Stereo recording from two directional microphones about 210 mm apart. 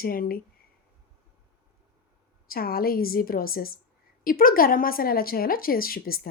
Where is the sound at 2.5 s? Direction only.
45° left (ahead or behind).